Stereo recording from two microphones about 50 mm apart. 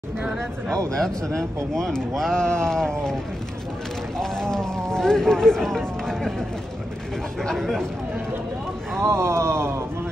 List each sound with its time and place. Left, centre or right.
0.9 s speech: centre
4.2 s speech: centre
7.4 s speech: centre
9.0 s speech: right